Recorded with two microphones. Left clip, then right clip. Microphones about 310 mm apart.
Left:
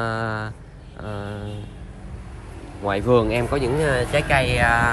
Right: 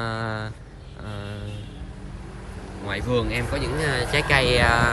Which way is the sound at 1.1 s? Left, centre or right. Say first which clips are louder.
Left 5 dB; centre.